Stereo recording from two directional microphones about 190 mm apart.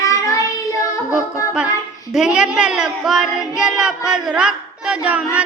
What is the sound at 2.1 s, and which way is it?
Child singing, 5° right (ahead or behind).